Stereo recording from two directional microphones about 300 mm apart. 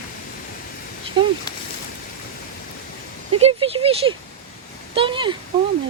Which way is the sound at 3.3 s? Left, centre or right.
Centre.